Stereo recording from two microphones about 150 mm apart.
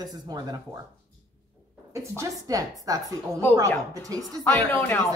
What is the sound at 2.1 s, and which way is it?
A woman's voice, 25° right (ahead or behind).